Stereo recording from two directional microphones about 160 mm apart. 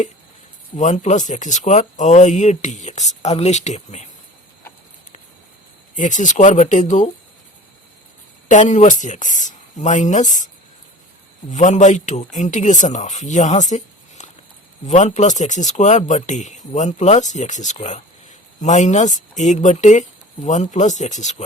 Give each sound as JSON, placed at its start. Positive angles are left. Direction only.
{"t": 0.8, "sound": "speech", "side_deg": 50}
{"t": 6.0, "sound": "speech", "side_deg": 50}
{"t": 8.4, "sound": "speech", "side_deg": 50}
{"t": 11.5, "sound": "speech", "side_deg": 50}